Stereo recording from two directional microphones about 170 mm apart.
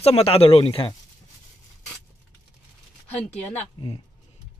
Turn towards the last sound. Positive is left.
turn(degrees=10)  # may be behind; listen again after turning